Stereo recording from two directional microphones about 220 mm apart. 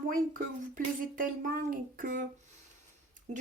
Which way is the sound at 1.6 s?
40° right (ahead or behind).